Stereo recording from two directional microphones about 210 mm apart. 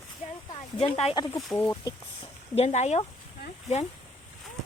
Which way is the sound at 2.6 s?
30° left (ahead or behind).